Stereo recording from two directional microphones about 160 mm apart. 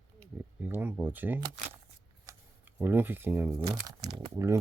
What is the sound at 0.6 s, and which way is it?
Speech, 10° right (ahead or behind).